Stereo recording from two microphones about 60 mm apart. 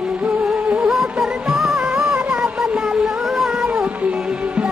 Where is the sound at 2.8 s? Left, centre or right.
Centre.